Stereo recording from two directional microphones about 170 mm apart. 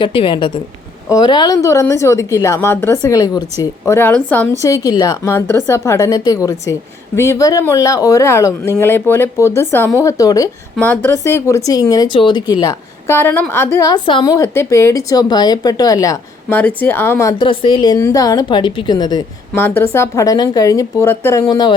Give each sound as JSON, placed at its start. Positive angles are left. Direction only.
{"t": 0.0, "sound": "speech", "side_deg": 30}
{"t": 4.6, "sound": "speech", "side_deg": 20}
{"t": 16.6, "sound": "speech", "side_deg": 10}
{"t": 17.5, "sound": "speech", "side_deg": 30}
{"t": 19.5, "sound": "speech", "side_deg": 10}